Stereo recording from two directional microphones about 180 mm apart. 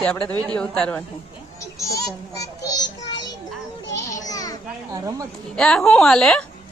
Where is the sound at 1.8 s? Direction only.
20° left (ahead or behind).